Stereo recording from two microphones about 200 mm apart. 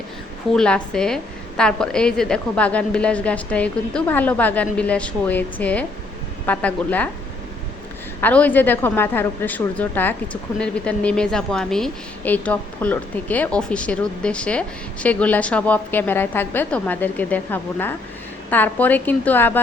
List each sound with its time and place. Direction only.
0.5 s a woman's voice: 5° left (ahead or behind)
8.2 s a woman's voice: 10° left (ahead or behind)